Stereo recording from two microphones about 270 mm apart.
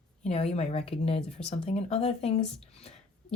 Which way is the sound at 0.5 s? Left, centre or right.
Left.